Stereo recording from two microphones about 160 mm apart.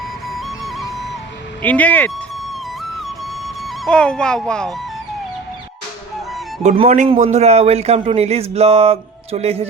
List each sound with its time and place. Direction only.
0.3 s music: centre (ahead or behind)
1.6 s speech: 10° left (ahead or behind)
3.4 s speech: 5° left (ahead or behind)
6.6 s speech: 45° right (ahead or behind)